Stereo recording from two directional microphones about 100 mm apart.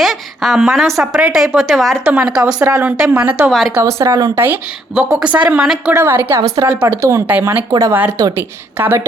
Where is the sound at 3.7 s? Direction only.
30° right (ahead or behind).